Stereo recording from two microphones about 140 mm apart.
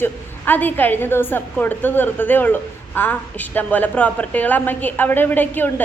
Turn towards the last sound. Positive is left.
turn(degrees=15)  # may be behind; listen again after turning